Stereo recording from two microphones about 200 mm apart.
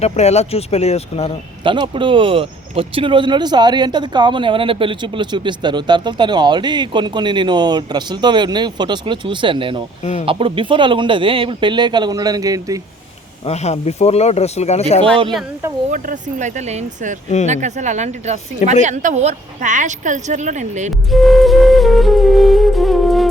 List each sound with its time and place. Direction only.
0.0 s speech: 35° left (ahead or behind)
1.6 s speech: 25° right (ahead or behind)
10.0 s speech: 35° left (ahead or behind)
10.2 s speech: 25° right (ahead or behind)
13.4 s speech: 35° left (ahead or behind)
15.9 s a woman's voice: 40° right (ahead or behind)
21.1 s music: centre (ahead or behind)